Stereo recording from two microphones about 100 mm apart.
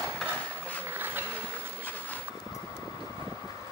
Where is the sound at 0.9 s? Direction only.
20° right (ahead or behind).